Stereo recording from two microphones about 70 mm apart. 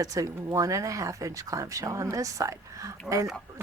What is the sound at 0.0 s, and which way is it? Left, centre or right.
Speech, right.